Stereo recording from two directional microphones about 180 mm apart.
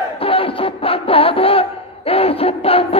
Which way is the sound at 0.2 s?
30° left (ahead or behind).